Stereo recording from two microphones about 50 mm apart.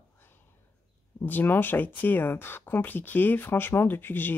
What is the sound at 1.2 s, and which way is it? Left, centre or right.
Speech, left.